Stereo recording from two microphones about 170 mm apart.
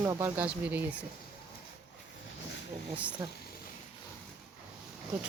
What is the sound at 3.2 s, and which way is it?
Speech, 25° right (ahead or behind).